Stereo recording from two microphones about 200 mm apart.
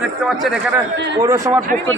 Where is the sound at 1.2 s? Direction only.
15° right (ahead or behind).